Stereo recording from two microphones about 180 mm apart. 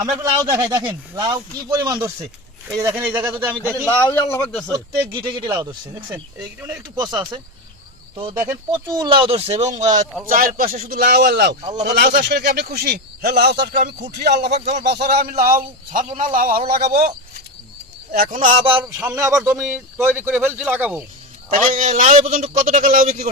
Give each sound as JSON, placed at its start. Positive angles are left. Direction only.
{"t": 0.2, "sound": "speech", "side_deg": -15}
{"t": 3.8, "sound": "speech", "side_deg": 10}
{"t": 5.2, "sound": "speech", "side_deg": -25}
{"t": 6.1, "sound": "speech", "side_deg": -10}
{"t": 7.0, "sound": "speech", "side_deg": -20}
{"t": 8.4, "sound": "a man's voice", "side_deg": -15}
{"t": 14.4, "sound": "speech", "side_deg": -35}
{"t": 14.8, "sound": "a man's voice", "side_deg": -65}
{"t": 18.1, "sound": "a man's voice", "side_deg": -50}
{"t": 18.6, "sound": "speech", "side_deg": -30}
{"t": 18.9, "sound": "speech", "side_deg": -10}
{"t": 19.4, "sound": "speech", "side_deg": 0}
{"t": 21.5, "sound": "a man's voice", "side_deg": -45}